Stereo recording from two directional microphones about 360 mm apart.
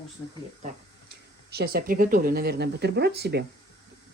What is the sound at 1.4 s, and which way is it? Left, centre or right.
Speech, right.